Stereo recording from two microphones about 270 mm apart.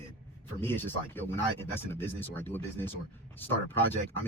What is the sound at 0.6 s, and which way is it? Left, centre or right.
Speech, centre.